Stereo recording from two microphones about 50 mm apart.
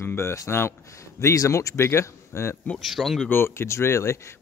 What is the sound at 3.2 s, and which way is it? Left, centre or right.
Speech, left.